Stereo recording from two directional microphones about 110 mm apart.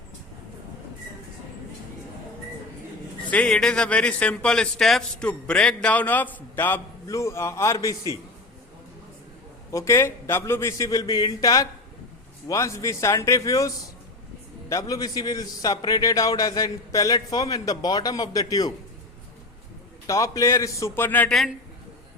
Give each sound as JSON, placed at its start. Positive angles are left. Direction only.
{"t": 3.2, "sound": "a man's voice", "side_deg": 10}
{"t": 9.7, "sound": "a man's voice", "side_deg": 25}
{"t": 20.1, "sound": "speech", "side_deg": 30}
{"t": 21.2, "sound": "a man's voice", "side_deg": 0}